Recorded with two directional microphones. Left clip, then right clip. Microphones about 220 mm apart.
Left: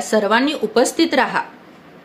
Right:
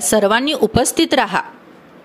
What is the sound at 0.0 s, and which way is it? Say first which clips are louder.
A woman's voice: right 2 dB; 40° right (ahead or behind).